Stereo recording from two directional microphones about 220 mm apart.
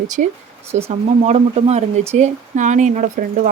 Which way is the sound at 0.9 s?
30° right (ahead or behind).